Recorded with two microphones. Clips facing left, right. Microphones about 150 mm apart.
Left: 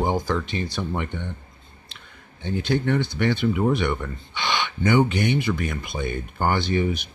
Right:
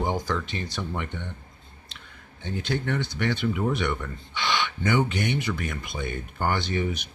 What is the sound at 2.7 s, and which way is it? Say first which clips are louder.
Speech: left 6 dB; 25° left (ahead or behind).